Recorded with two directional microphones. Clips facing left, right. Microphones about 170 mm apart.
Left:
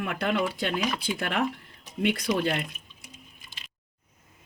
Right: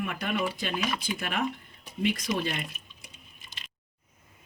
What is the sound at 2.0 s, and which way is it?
Speech, 65° left (ahead or behind).